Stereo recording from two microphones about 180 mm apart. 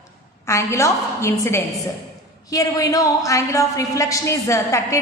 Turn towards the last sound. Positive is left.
turn(degrees=15)  # may be behind; listen again after turning